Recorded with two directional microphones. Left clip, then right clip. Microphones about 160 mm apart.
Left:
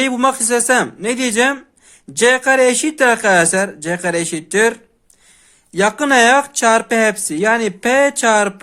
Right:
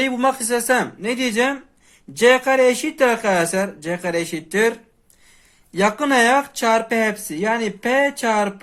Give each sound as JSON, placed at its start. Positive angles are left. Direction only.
{"t": 0.0, "sound": "speech", "side_deg": 45}
{"t": 5.7, "sound": "speech", "side_deg": 35}